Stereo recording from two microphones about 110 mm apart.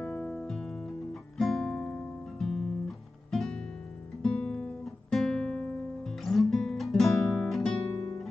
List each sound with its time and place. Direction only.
0.0 s music: 10° left (ahead or behind)
1.4 s guitar: 5° left (ahead or behind)
3.3 s music: 5° left (ahead or behind)
4.2 s guitar: 5° left (ahead or behind)
7.9 s music: 30° left (ahead or behind)